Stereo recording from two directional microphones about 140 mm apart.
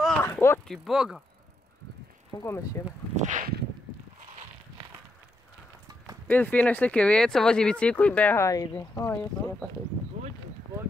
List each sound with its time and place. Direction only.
0.2 s speech: 20° left (ahead or behind)
0.7 s speech: centre (ahead or behind)
2.4 s speech: 20° left (ahead or behind)
3.2 s a sound: 65° right (ahead or behind)
6.2 s speech: 10° left (ahead or behind)